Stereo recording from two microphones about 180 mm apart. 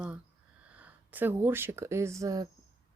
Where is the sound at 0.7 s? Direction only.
10° right (ahead or behind).